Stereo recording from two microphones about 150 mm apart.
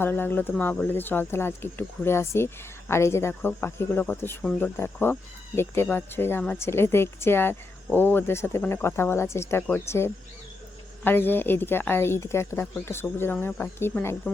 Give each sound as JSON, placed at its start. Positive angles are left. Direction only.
{"t": 0.0, "sound": "speech", "side_deg": 15}